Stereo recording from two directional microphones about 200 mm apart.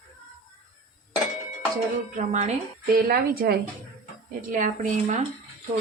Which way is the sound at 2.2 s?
35° right (ahead or behind).